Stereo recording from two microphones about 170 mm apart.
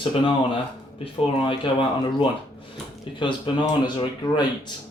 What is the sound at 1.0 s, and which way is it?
Speech, 30° left (ahead or behind).